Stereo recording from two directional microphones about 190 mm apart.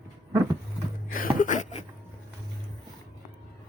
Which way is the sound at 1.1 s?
45° left (ahead or behind).